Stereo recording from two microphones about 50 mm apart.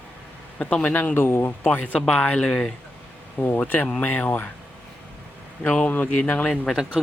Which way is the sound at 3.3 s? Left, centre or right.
Left.